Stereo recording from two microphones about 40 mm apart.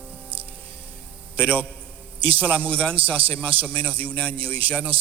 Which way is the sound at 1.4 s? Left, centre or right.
Left.